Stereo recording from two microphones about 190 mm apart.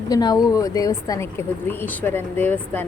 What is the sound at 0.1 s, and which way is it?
Speech, 20° left (ahead or behind).